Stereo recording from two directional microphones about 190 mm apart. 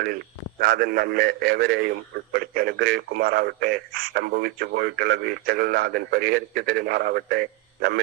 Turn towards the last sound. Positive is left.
turn(degrees=-55)  # may be behind; listen again after turning